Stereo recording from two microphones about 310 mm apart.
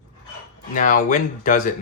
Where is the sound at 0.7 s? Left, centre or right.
Left.